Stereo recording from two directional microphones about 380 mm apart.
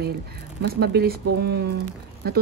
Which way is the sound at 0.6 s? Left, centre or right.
Right.